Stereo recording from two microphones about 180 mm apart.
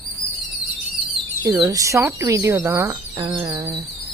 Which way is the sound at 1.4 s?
20° right (ahead or behind).